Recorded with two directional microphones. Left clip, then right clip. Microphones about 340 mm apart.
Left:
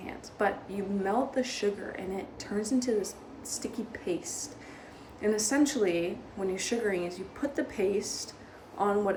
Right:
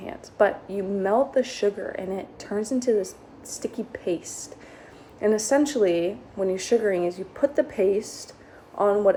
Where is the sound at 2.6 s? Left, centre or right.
Centre.